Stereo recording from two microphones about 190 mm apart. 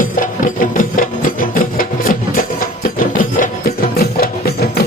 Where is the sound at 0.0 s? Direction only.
45° left (ahead or behind).